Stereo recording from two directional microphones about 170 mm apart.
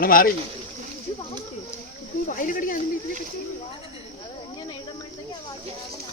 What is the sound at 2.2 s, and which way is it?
Speech, 50° left (ahead or behind).